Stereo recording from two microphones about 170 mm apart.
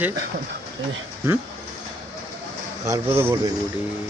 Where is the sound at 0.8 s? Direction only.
90° right.